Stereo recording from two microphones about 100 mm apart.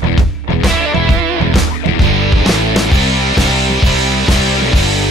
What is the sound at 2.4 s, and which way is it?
Music, centre (ahead or behind).